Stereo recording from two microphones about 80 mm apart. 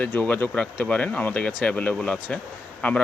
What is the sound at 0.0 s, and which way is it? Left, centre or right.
Speech, centre.